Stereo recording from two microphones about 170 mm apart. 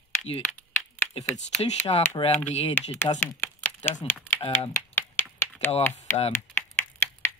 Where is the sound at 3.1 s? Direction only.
10° left (ahead or behind).